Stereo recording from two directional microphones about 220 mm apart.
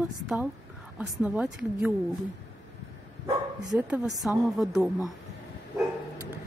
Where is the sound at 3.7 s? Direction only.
Centre (ahead or behind).